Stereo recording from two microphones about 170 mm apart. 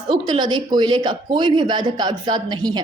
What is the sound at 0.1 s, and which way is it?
Speech, 25° right (ahead or behind).